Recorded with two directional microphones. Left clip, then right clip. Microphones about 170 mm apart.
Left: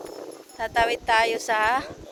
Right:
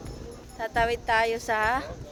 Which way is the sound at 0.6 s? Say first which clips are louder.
Left 3 dB; 15° left (ahead or behind).